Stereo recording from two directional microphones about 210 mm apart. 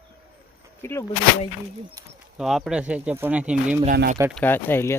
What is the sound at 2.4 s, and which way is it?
Speech, centre (ahead or behind).